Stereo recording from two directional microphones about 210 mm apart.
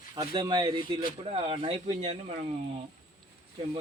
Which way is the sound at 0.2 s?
20° right (ahead or behind).